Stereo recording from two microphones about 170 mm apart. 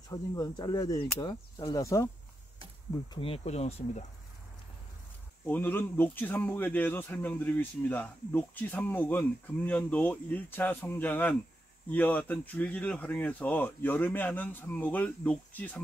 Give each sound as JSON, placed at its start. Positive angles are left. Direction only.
{"t": 0.1, "sound": "speech", "side_deg": 20}
{"t": 3.1, "sound": "speech", "side_deg": 35}
{"t": 5.4, "sound": "speech", "side_deg": 10}